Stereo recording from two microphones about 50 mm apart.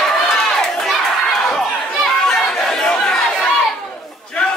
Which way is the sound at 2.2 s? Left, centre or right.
Centre.